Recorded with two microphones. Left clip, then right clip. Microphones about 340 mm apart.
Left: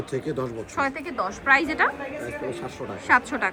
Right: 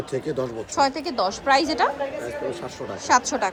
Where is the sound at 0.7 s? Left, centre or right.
Centre.